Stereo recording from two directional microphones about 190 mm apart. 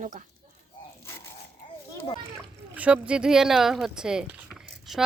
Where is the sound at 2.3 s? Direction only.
5° right (ahead or behind).